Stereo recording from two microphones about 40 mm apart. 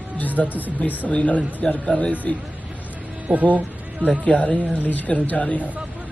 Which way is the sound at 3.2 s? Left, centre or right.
Right.